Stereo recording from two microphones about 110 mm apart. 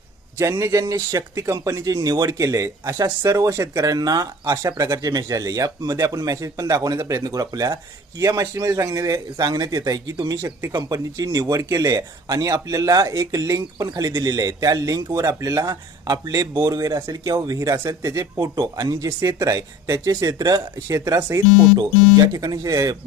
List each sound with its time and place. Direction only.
0.3 s speech: 25° right (ahead or behind)
10.7 s speech: 40° right (ahead or behind)
21.8 s speech: 35° right (ahead or behind)